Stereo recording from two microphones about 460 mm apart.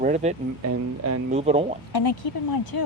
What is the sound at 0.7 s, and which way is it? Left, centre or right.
Speech, right.